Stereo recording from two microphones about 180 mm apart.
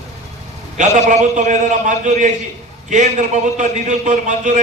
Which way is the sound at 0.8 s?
45° right (ahead or behind).